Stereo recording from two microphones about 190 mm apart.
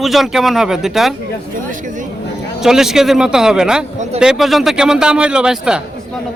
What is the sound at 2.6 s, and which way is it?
A man's voice, centre (ahead or behind).